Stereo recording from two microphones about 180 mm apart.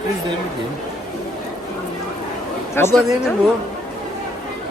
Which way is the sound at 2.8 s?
15° left (ahead or behind).